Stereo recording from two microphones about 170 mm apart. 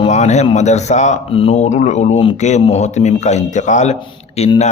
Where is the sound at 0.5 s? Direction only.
40° left (ahead or behind).